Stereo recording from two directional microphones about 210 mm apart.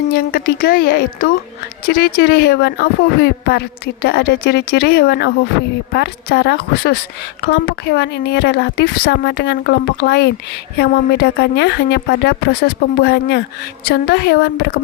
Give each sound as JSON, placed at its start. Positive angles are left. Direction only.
{"t": 0.1, "sound": "a woman's voice", "side_deg": 50}